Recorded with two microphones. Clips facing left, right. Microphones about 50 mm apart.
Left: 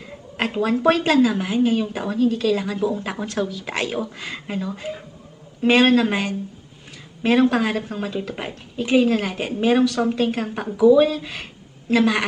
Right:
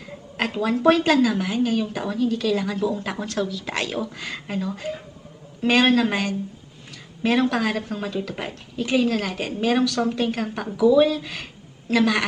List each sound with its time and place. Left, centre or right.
0.3 s a woman's voice: centre